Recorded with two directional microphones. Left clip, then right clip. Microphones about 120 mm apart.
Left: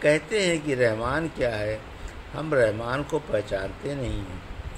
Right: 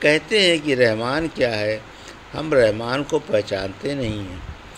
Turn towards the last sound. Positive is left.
turn(degrees=-55)  # may be behind; listen again after turning